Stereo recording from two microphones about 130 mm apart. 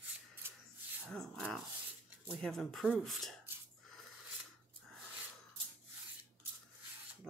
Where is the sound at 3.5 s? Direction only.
15° right (ahead or behind).